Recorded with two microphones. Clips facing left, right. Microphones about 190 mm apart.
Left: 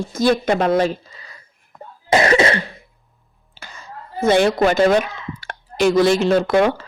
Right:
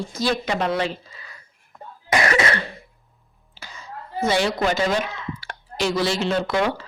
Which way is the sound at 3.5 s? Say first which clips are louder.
Left 1 dB; 50° left (ahead or behind).